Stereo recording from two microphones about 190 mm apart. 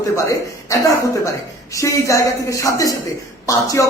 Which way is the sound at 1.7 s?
15° left (ahead or behind).